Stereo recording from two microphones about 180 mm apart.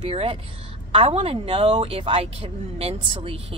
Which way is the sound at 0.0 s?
35° right (ahead or behind).